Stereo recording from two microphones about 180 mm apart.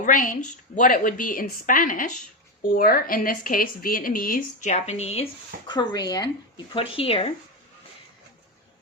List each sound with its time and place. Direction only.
0.0 s speech: 50° left (ahead or behind); by 6.3 s 20° left (ahead or behind)
6.9 s speech: 30° left (ahead or behind)